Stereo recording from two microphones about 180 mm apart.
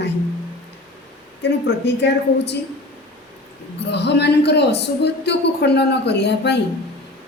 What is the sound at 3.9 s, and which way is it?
Speech, 70° left (ahead or behind).